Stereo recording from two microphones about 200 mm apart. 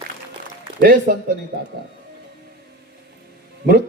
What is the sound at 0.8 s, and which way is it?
Speech, 50° right (ahead or behind).